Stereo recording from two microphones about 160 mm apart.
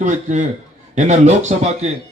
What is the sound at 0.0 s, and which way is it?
A man's voice, 50° right (ahead or behind).